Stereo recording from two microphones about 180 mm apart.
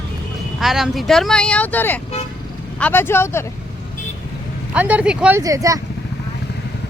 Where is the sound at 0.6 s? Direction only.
Centre (ahead or behind).